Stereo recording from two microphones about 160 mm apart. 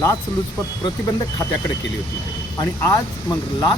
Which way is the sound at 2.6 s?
20° left (ahead or behind).